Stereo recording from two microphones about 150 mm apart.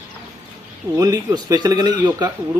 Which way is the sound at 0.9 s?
25° right (ahead or behind).